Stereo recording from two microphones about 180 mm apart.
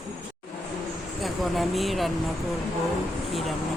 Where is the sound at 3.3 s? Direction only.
Centre (ahead or behind).